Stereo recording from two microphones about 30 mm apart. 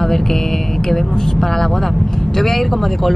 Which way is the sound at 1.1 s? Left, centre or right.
Left.